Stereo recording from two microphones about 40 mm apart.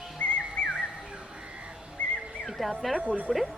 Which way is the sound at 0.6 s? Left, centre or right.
Left.